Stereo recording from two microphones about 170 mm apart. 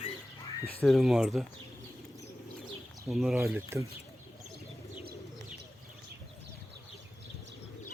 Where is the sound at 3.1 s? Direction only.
5° right (ahead or behind).